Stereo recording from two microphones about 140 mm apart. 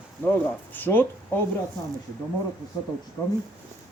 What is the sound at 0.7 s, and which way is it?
Speech, 15° left (ahead or behind).